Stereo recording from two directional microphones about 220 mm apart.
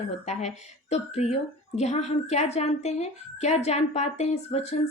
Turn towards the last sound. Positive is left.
turn(degrees=30)  # may be behind; listen again after turning